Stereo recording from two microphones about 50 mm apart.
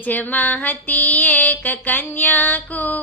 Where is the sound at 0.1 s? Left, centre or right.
Left.